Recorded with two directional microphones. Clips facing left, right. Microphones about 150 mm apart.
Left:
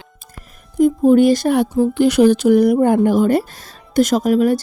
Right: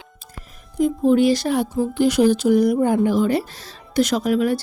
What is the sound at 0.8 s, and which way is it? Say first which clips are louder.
Speech: left 5 dB; 50° left (ahead or behind).